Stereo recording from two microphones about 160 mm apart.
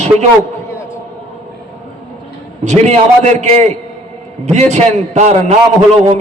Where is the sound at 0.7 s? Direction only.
15° left (ahead or behind).